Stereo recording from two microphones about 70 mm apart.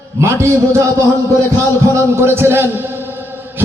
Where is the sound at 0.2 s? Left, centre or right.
Right.